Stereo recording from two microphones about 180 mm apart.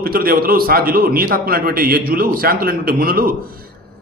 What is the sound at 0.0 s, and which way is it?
A man's voice, 55° right (ahead or behind).